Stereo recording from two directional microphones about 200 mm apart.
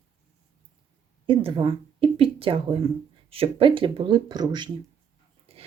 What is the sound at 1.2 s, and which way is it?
Speech, 25° right (ahead or behind).